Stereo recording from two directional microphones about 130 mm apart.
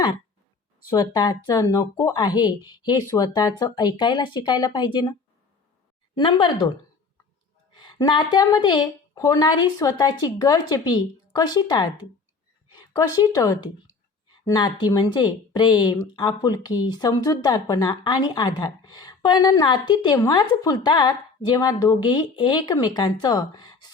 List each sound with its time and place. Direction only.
0.9 s speech: 30° left (ahead or behind)
6.3 s speech: 30° left (ahead or behind)
7.8 s speech: 35° left (ahead or behind)
12.9 s a woman's voice: 30° left (ahead or behind)